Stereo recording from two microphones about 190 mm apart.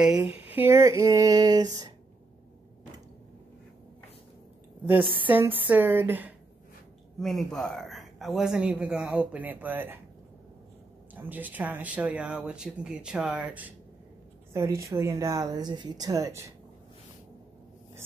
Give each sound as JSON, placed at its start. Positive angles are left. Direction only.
{"t": 0.0, "sound": "speech", "side_deg": -5}
{"t": 5.3, "sound": "speech", "side_deg": -10}
{"t": 7.2, "sound": "speech", "side_deg": 0}
{"t": 11.1, "sound": "speech", "side_deg": -10}